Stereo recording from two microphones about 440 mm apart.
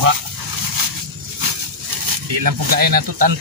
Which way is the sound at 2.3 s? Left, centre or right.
Right.